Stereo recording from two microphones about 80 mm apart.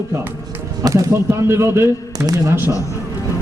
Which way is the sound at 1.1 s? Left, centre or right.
Right.